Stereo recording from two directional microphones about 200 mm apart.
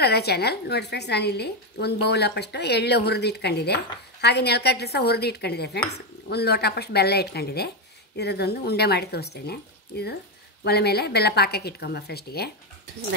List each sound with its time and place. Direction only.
0.0 s a woman's voice: 55° left (ahead or behind)